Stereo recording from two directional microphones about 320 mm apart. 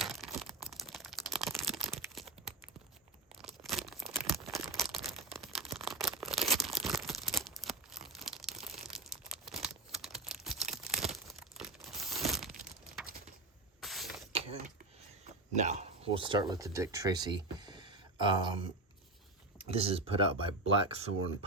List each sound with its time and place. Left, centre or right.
0.0 s crumpling: centre
1.3 s a sound: centre
3.4 s crumpling: centre
5.3 s tearing: centre
11.1 s crumpling: centre
13.8 s spray: centre
14.3 s a sound: centre
15.5 s speech: right
19.6 s speech: centre